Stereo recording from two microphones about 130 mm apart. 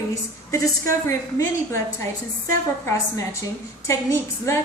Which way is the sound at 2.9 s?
20° left (ahead or behind).